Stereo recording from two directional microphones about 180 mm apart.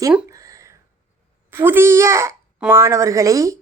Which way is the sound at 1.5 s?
10° right (ahead or behind).